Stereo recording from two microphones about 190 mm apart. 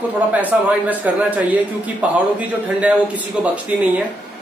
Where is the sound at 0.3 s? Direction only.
10° right (ahead or behind).